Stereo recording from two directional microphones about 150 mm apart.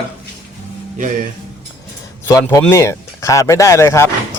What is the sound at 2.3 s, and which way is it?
Speech, 20° left (ahead or behind).